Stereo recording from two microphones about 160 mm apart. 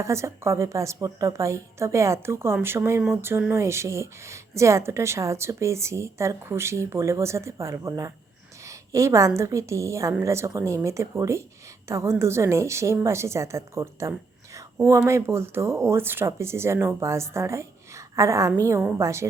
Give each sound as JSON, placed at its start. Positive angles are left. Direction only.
{"t": 0.0, "sound": "a woman's voice", "side_deg": -20}